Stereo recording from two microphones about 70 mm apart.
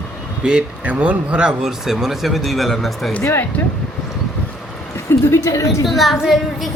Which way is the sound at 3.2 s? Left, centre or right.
Left.